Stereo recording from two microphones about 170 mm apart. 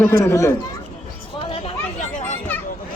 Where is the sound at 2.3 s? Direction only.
10° left (ahead or behind).